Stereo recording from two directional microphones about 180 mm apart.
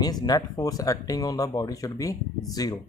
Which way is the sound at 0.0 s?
20° left (ahead or behind).